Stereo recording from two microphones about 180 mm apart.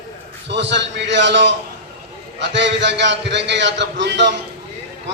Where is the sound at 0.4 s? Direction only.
75° right (ahead or behind).